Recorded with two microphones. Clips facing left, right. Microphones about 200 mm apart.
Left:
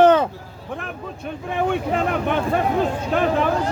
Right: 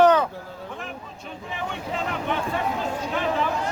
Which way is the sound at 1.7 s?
55° left (ahead or behind).